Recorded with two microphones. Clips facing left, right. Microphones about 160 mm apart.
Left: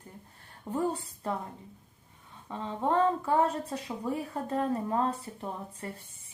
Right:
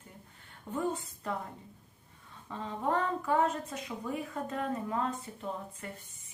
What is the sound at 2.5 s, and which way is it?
A woman's voice, 25° left (ahead or behind).